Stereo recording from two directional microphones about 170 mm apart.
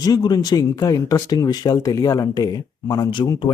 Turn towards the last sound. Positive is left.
turn(degrees=25)  # may be behind; listen again after turning